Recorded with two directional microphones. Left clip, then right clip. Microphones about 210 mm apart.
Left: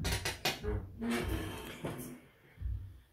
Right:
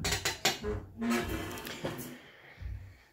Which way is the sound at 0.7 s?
25° right (ahead or behind).